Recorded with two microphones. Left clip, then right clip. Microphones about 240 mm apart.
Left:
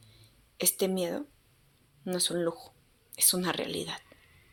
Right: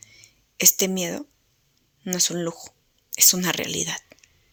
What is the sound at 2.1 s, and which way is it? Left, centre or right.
Speech, right.